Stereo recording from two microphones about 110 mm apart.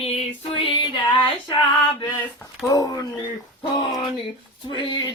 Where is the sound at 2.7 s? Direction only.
35° left (ahead or behind).